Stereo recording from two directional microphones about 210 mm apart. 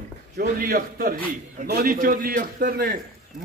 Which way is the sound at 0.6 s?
40° right (ahead or behind).